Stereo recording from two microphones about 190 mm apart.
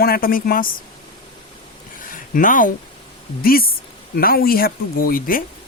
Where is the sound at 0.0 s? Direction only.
50° left (ahead or behind).